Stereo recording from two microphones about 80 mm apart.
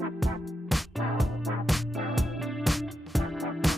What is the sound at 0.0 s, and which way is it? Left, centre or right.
Music, centre.